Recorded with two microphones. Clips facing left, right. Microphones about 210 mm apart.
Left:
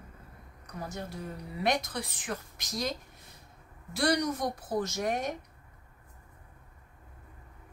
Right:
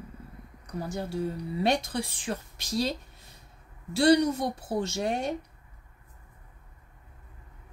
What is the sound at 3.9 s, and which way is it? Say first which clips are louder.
Speech: right 7 dB; 30° right (ahead or behind).